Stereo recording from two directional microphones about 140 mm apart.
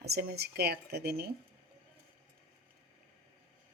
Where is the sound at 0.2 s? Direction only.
90° right.